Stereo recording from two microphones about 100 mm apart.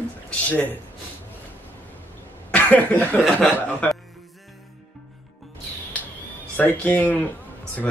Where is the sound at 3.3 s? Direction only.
10° left (ahead or behind).